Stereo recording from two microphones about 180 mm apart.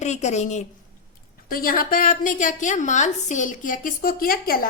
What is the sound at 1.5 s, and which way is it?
A woman's voice, 55° left (ahead or behind).